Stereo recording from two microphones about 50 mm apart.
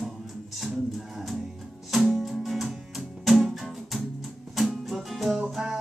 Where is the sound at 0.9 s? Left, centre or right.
Centre.